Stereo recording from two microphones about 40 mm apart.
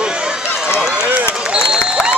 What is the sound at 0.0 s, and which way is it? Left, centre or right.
Run, right.